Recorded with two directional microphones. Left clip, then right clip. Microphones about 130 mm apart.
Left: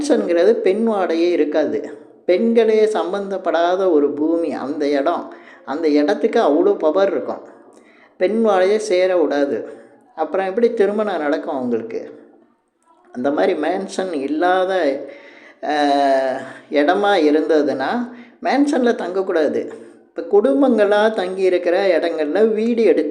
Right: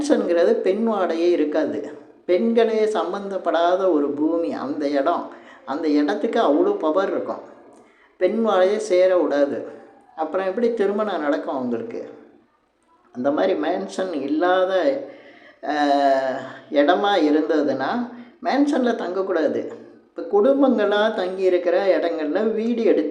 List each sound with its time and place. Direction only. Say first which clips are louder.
0.0 s a woman's voice: left 3 dB; 25° left (ahead or behind)
13.2 s a woman's voice: left 3 dB; 30° left (ahead or behind)